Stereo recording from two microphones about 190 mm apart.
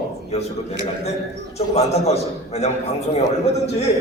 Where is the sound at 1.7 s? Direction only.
35° left (ahead or behind).